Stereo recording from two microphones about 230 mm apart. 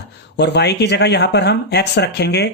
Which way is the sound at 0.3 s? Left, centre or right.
Left.